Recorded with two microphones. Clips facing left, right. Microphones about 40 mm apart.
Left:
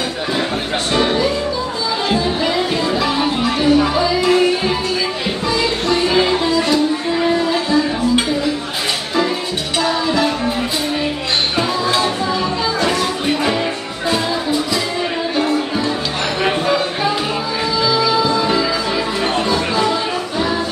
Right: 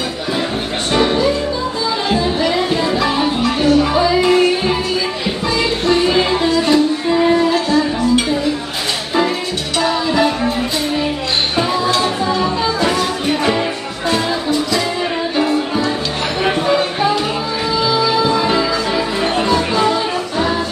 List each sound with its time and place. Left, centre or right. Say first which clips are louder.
2.0 s music: right 1 dB; centre
3.4 s music: even; centre
3.9 s music: right 2 dB; centre
9.8 s music: right 2 dB; centre
12.0 s music: right 1 dB; centre
17.8 s music: right 1 dB; right
19.3 s music: right 3 dB; centre